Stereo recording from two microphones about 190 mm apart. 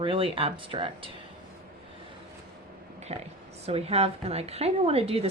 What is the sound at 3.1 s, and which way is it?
A woman's voice, 35° right (ahead or behind).